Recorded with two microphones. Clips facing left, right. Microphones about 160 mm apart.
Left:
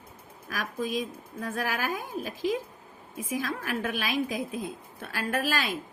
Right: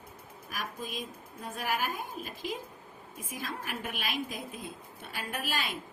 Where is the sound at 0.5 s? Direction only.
90° left.